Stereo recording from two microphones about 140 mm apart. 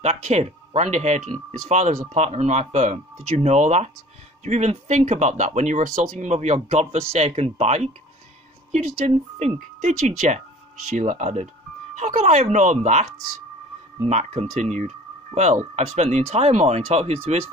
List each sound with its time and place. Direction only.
0.0 s speech: 50° right (ahead or behind)